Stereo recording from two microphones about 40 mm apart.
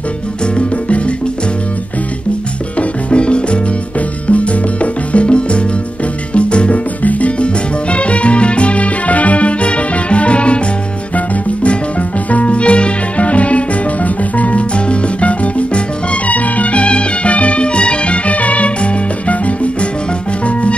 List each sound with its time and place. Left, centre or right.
0.6 s music: left
2.8 s music: left
7.0 s salsa music: left
11.1 s music: left